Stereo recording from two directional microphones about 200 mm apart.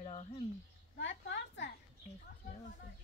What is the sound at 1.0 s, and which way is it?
Speech, 65° left (ahead or behind).